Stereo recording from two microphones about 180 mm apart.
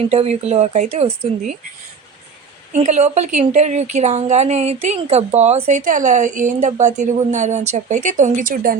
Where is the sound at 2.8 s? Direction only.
40° right (ahead or behind).